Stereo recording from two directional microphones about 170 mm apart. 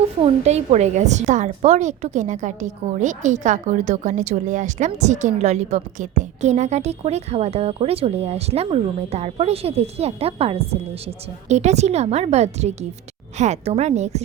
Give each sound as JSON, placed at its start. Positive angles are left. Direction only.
{"t": 0.2, "sound": "a woman's voice", "side_deg": -40}